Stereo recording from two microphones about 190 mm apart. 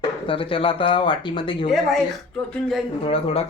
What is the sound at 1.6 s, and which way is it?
A man's voice, centre (ahead or behind).